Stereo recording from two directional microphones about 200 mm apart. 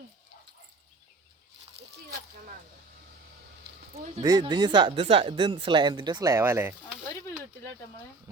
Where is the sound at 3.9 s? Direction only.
35° right (ahead or behind).